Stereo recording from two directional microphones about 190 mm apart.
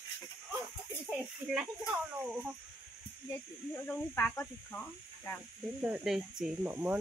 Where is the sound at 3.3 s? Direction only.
10° left (ahead or behind).